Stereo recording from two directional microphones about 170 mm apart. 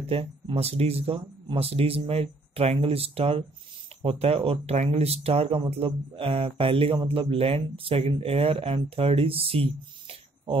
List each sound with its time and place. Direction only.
0.0 s speech: 35° right (ahead or behind)